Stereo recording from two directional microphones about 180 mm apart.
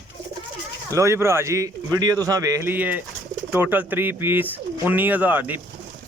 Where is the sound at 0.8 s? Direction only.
15° right (ahead or behind).